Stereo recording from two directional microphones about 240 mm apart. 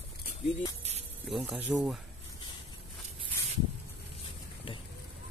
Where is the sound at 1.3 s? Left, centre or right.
Centre.